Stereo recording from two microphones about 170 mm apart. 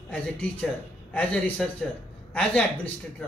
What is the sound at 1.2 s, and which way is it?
A man's voice, 10° left (ahead or behind).